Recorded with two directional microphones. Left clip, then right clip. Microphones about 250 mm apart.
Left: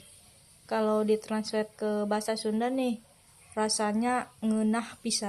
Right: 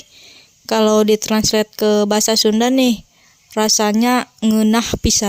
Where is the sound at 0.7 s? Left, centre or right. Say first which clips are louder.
Right 13 dB; right.